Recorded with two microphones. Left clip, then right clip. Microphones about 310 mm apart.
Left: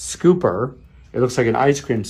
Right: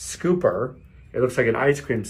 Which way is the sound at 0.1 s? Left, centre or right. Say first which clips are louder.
Left 4 dB; left.